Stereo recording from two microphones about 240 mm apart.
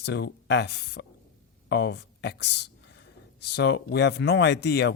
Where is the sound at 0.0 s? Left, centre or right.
Left.